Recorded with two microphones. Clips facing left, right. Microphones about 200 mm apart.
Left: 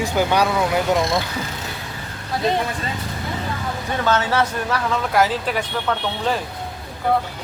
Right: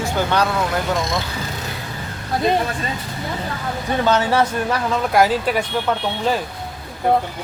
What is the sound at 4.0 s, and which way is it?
Speech, 15° right (ahead or behind).